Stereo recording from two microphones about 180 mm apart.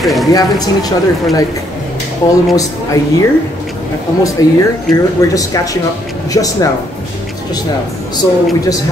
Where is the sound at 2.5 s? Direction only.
20° left (ahead or behind).